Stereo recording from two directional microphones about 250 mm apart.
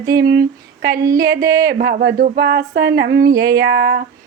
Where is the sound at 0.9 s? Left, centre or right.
Centre.